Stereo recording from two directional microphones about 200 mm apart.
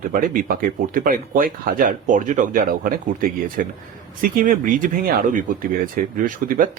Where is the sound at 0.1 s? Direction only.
45° right (ahead or behind).